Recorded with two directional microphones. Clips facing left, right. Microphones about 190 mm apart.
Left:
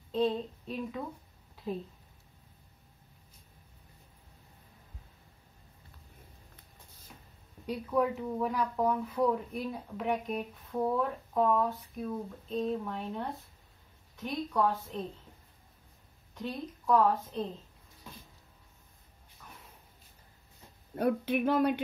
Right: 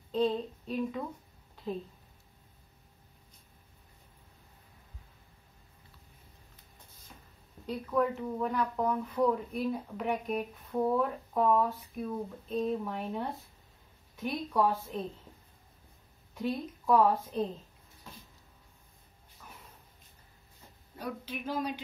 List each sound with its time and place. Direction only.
0.1 s child singing: 5° left (ahead or behind)
1.6 s speech: 10° left (ahead or behind)
7.6 s a woman's voice: 10° left (ahead or behind); by 15.0 s 10° right (ahead or behind)
16.3 s a woman's voice: 10° right (ahead or behind)
19.4 s a sound: 5° right (ahead or behind)
20.9 s speech: 60° left (ahead or behind)